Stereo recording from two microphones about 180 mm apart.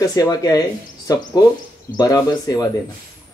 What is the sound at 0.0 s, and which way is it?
Speech, 20° left (ahead or behind).